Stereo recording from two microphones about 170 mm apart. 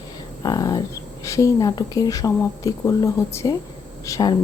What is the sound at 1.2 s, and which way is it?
Speech, 20° left (ahead or behind).